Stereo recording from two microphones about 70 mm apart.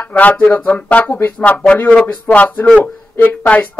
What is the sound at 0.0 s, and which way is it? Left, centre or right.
Speech, left.